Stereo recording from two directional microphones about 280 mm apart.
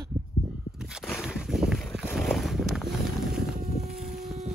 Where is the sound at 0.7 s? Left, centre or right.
Centre.